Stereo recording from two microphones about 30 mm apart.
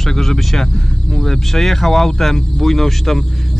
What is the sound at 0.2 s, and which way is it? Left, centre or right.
Speech, centre.